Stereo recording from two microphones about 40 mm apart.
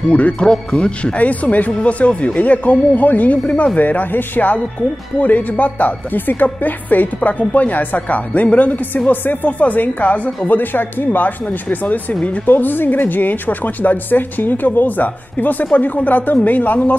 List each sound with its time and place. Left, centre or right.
0.1 s speech: left
1.1 s speech: left
9.5 s speech: left
9.8 s speech: left